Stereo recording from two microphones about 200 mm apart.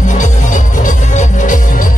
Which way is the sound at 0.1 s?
40° left (ahead or behind).